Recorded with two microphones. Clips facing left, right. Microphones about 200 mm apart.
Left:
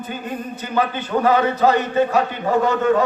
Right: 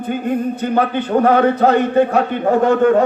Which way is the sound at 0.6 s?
55° right (ahead or behind).